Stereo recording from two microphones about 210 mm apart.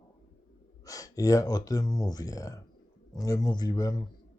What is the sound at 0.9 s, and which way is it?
Speech, 15° left (ahead or behind).